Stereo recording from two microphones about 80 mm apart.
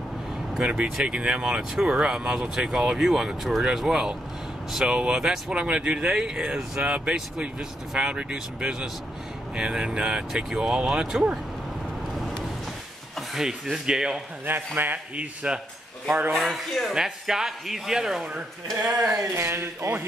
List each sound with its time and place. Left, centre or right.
0.6 s speech: centre
13.3 s speech: centre
14.8 s speech: right
16.3 s speech: centre
19.1 s speech: right